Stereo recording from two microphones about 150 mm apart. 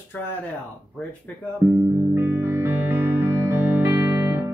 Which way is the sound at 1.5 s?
10° right (ahead or behind).